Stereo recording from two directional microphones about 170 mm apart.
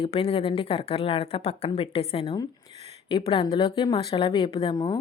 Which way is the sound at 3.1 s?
30° left (ahead or behind).